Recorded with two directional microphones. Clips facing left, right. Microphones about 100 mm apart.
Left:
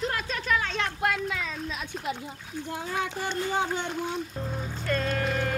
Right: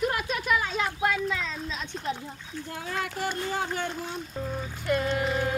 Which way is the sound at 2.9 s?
20° left (ahead or behind).